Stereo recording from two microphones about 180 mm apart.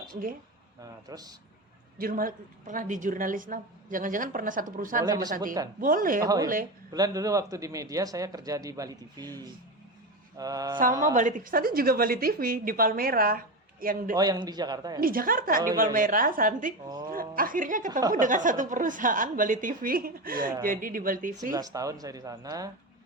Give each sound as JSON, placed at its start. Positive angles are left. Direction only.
{"t": 0.1, "sound": "speech", "side_deg": -50}
{"t": 1.0, "sound": "speech", "side_deg": -20}
{"t": 2.0, "sound": "a woman's voice", "side_deg": -50}
{"t": 5.0, "sound": "speech", "side_deg": -20}
{"t": 5.8, "sound": "a woman's voice", "side_deg": -50}
{"t": 6.2, "sound": "speech", "side_deg": -20}
{"t": 11.1, "sound": "a woman's voice", "side_deg": -45}
{"t": 14.2, "sound": "speech", "side_deg": -20}
{"t": 15.0, "sound": "a woman's voice", "side_deg": -50}
{"t": 21.5, "sound": "speech", "side_deg": -20}